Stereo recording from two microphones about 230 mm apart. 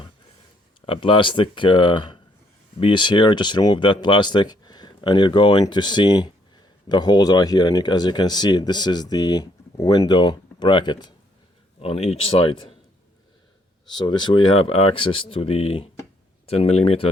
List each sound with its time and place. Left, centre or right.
0.9 s speech: left
13.9 s speech: centre